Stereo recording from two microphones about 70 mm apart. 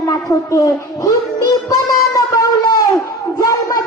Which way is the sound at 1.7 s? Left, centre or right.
Left.